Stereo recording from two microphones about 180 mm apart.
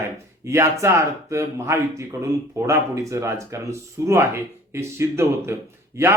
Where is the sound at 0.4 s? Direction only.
15° right (ahead or behind).